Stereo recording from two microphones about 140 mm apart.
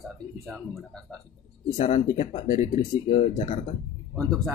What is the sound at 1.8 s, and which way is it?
Speech, 60° left (ahead or behind).